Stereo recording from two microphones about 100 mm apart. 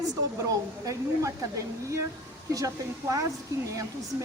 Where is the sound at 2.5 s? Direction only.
35° right (ahead or behind).